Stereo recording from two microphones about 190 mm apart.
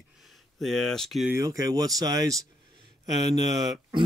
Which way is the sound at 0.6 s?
Centre (ahead or behind).